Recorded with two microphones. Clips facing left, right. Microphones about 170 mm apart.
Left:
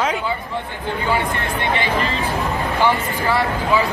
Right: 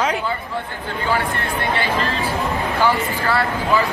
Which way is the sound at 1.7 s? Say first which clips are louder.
Left 1 dB; 15° left (ahead or behind).